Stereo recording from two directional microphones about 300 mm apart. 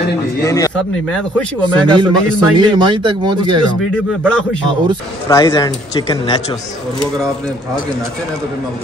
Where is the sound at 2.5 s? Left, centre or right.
Centre.